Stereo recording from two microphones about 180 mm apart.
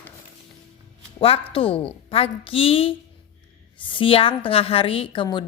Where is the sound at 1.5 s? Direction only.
30° left (ahead or behind).